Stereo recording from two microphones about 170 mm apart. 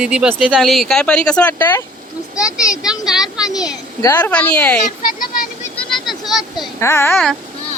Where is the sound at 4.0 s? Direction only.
15° left (ahead or behind).